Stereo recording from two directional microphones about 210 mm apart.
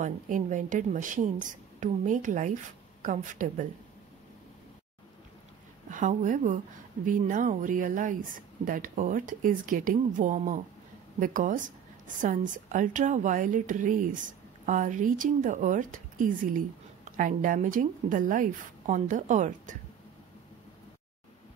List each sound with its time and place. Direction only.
0.0 s a woman's voice: 35° right (ahead or behind)
5.9 s a woman's voice: 40° right (ahead or behind)